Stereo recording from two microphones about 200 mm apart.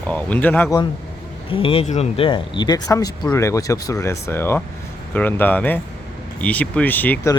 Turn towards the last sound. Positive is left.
turn(degrees=10)  # may be behind; listen again after turning